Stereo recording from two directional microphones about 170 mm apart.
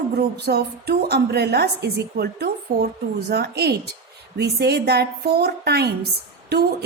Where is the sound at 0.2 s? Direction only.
70° right (ahead or behind).